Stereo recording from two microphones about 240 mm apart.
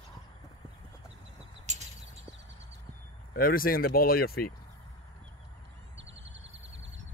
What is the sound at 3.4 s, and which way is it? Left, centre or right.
Speech, left.